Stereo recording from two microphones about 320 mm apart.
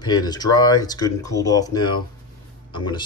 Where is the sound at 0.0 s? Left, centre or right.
Centre.